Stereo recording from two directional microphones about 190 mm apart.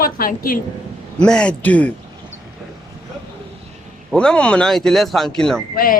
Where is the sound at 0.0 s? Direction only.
50° left (ahead or behind).